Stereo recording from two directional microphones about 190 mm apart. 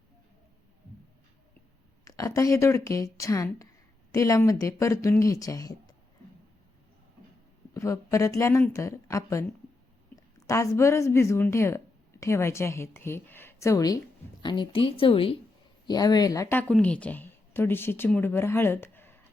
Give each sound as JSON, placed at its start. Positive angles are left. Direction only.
{"t": 2.0, "sound": "speech", "side_deg": 15}
{"t": 7.7, "sound": "a woman's voice", "side_deg": 15}